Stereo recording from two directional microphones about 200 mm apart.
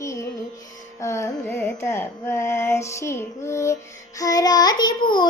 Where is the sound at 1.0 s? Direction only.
15° left (ahead or behind).